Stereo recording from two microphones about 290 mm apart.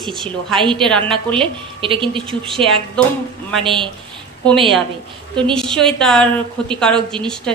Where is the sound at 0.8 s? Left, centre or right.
Centre.